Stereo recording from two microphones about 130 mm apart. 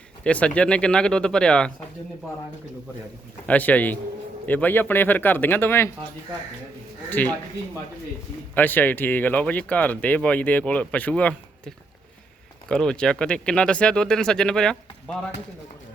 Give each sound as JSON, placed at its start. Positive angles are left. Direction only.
{"t": 0.3, "sound": "speech", "side_deg": 10}
{"t": 3.4, "sound": "speech", "side_deg": 10}
{"t": 7.1, "sound": "speech", "side_deg": 15}
{"t": 8.5, "sound": "speech", "side_deg": 15}